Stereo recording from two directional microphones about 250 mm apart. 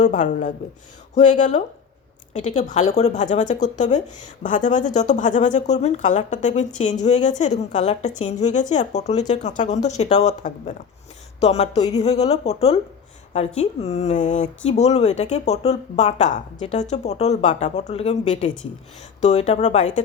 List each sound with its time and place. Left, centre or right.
0.0 s a woman's voice: left; by 11.9 s centre
11.9 s a woman's voice: left